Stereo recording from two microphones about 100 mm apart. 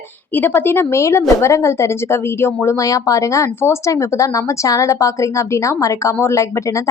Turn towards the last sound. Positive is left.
turn(degrees=30)  # may be behind; listen again after turning